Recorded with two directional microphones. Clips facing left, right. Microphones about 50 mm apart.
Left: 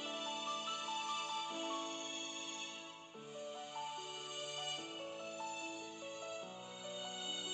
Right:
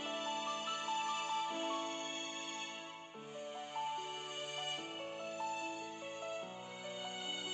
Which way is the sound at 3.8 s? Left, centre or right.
Right.